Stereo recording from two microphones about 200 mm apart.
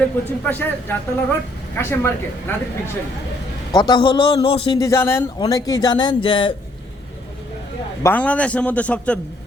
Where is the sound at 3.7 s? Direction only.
20° left (ahead or behind).